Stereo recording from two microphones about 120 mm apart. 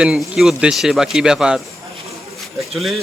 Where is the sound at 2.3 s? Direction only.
Centre (ahead or behind).